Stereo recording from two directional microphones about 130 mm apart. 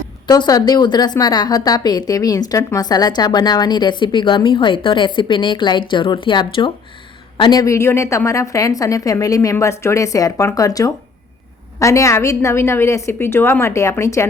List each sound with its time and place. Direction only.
0.3 s a woman's voice: 30° left (ahead or behind)
7.6 s a woman's voice: 20° left (ahead or behind)